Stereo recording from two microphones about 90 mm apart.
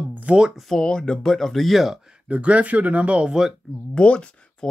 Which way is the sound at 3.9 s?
10° left (ahead or behind).